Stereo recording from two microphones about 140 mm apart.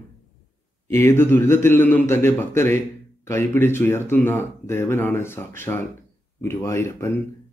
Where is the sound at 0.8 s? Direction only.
20° left (ahead or behind).